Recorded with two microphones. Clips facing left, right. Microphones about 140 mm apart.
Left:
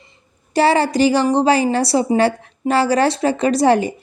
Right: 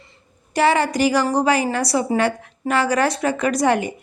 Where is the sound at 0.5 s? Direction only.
30° left (ahead or behind).